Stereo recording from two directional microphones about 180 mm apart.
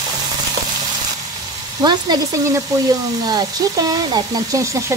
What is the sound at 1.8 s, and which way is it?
Speech, 20° right (ahead or behind).